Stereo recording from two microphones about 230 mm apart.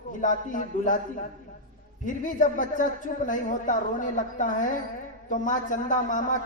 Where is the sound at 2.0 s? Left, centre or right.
Left.